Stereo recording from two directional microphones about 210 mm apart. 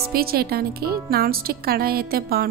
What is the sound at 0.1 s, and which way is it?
A woman's voice, 45° right (ahead or behind).